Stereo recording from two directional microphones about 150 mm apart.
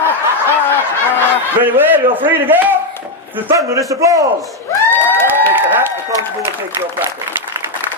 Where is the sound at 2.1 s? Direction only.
15° right (ahead or behind).